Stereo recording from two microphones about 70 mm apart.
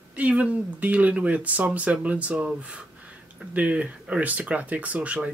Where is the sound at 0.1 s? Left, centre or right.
Centre.